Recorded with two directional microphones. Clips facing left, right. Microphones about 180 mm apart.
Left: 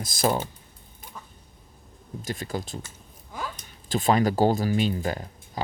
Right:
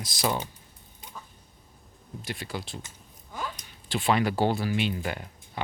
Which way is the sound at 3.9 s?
40° left (ahead or behind).